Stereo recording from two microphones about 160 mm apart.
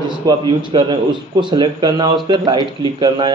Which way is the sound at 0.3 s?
30° right (ahead or behind).